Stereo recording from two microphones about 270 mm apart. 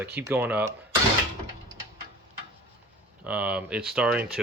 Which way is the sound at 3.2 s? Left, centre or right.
Centre.